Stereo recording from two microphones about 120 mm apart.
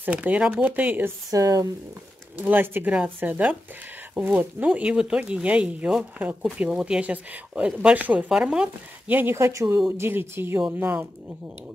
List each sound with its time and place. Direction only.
0.0 s speech: 15° right (ahead or behind)
1.3 s speech: 30° right (ahead or behind)
2.3 s speech: 15° right (ahead or behind)